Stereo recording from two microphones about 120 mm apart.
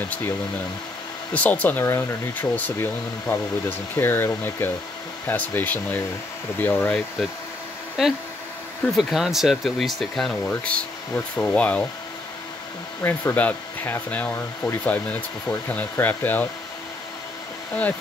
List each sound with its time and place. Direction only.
1.3 s speech: 15° left (ahead or behind)
8.0 s speech: centre (ahead or behind)
13.0 s speech: 15° left (ahead or behind)